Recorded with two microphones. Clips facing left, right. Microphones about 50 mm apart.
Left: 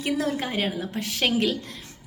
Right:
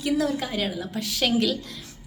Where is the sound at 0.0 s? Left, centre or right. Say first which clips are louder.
Right 1 dB; left.